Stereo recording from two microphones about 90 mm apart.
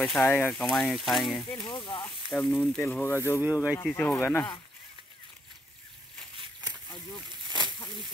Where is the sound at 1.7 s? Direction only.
55° left (ahead or behind).